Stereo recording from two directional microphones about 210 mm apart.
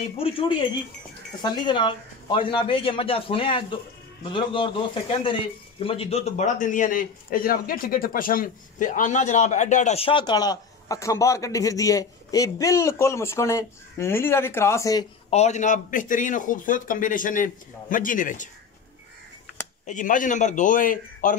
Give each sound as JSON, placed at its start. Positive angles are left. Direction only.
{"t": 1.4, "sound": "a man's voice", "side_deg": 20}
{"t": 15.2, "sound": "speech", "side_deg": 30}
{"t": 19.9, "sound": "speech", "side_deg": 40}